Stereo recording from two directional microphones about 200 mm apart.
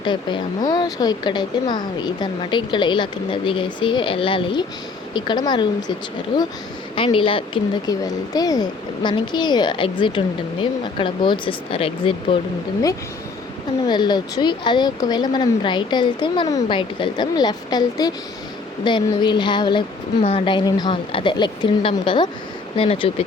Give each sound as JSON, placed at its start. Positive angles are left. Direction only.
{"t": 0.0, "sound": "a woman's voice", "side_deg": 25}
{"t": 13.8, "sound": "a woman's voice", "side_deg": 20}